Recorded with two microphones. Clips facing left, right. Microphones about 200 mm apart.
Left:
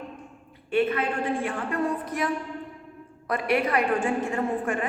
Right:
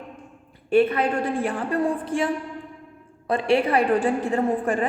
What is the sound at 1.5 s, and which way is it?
A woman's voice, 35° right (ahead or behind).